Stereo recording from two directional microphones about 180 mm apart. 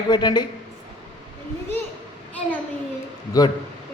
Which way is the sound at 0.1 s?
25° left (ahead or behind).